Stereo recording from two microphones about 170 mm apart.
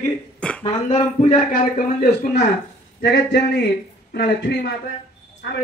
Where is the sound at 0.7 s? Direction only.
40° left (ahead or behind).